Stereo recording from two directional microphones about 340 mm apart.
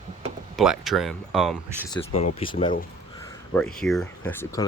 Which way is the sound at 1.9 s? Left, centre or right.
Centre.